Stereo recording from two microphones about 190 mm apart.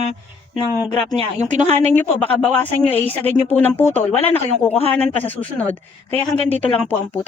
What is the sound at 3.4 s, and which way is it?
A woman's voice, 10° left (ahead or behind).